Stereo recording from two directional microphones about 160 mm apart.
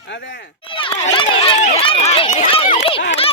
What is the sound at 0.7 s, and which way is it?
Run, 35° left (ahead or behind).